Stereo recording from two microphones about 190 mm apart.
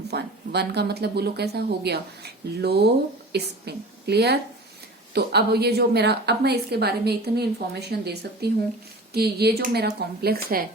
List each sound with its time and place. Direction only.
0.1 s a woman's voice: 60° right (ahead or behind)